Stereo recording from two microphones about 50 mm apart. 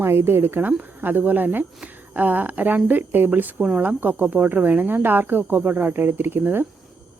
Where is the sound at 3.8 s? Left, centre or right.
Right.